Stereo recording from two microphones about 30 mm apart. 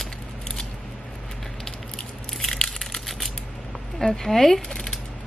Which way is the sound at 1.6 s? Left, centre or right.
Centre.